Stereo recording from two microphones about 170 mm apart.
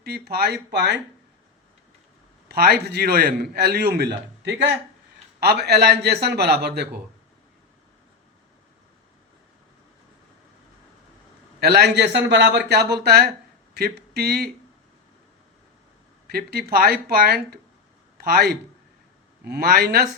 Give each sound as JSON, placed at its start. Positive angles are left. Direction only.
{"t": 0.0, "sound": "a man's voice", "side_deg": -65}
{"t": 2.5, "sound": "a man's voice", "side_deg": -70}
{"t": 11.6, "sound": "a man's voice", "side_deg": -70}
{"t": 16.2, "sound": "a man's voice", "side_deg": -65}